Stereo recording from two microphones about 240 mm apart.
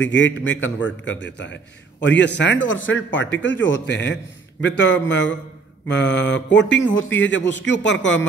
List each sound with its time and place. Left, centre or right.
0.0 s a man's voice: left